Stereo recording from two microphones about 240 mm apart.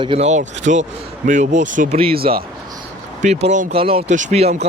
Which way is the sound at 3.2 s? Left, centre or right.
Right.